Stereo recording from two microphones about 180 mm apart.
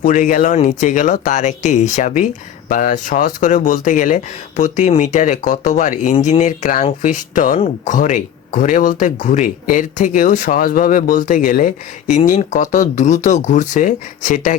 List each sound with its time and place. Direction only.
0.0 s speech: 45° left (ahead or behind)